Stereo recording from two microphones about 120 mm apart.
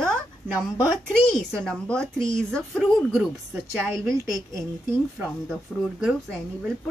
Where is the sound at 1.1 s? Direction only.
10° left (ahead or behind).